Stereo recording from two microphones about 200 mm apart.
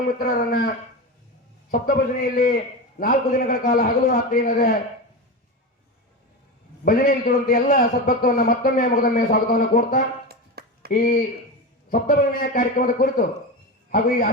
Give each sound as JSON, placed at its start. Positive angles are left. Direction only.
{"t": 0.2, "sound": "a man's voice", "side_deg": 45}
{"t": 1.7, "sound": "a man's voice", "side_deg": 45}
{"t": 6.8, "sound": "a man's voice", "side_deg": 45}
{"t": 10.2, "sound": "a sound", "side_deg": -50}
{"t": 10.9, "sound": "a man's voice", "side_deg": 50}